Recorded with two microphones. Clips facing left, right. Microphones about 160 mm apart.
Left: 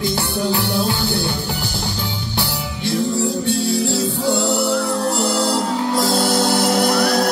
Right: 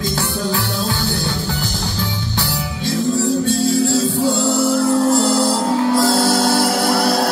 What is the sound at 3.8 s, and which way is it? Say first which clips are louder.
Music: right 3 dB; 15° left (ahead or behind).